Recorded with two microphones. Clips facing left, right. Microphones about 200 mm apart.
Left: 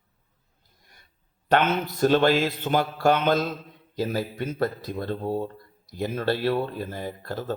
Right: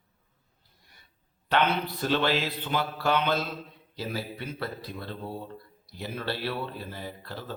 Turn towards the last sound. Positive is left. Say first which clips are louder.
# left 7 dB
turn(degrees=45)  # may be behind; listen again after turning